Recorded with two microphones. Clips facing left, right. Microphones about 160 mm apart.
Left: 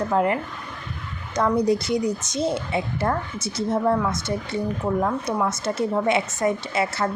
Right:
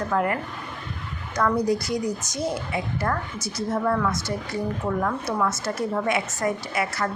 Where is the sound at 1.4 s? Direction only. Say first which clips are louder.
Left 2 dB; 20° left (ahead or behind).